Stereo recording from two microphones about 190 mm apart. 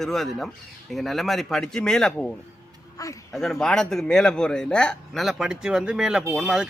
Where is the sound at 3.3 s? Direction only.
Centre (ahead or behind).